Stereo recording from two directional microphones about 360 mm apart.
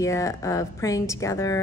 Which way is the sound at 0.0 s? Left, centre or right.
Centre.